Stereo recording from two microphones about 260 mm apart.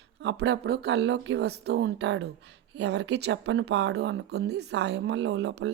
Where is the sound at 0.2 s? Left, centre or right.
Right.